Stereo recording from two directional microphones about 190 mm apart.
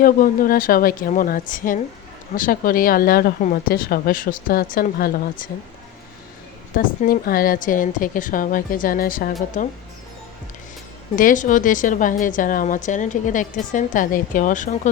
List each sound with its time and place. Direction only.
0.0 s speech: 45° left (ahead or behind)
6.7 s speech: 50° left (ahead or behind)
11.2 s speech: 45° left (ahead or behind)